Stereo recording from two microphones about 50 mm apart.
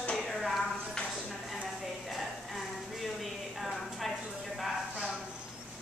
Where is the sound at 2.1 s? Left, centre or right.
Centre.